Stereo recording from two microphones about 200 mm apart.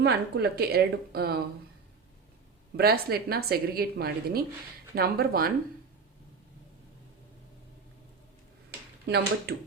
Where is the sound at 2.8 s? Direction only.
50° right (ahead or behind).